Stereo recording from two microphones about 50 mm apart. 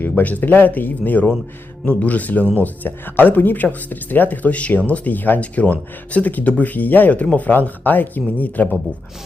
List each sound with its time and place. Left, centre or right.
0.2 s speech: left